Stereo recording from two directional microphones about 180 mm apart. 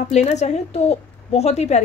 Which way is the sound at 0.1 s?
40° left (ahead or behind).